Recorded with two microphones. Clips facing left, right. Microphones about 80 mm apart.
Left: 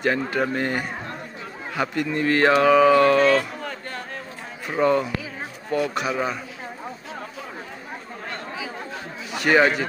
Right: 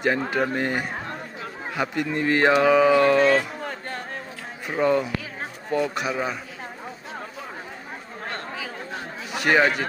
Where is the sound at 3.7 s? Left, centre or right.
Right.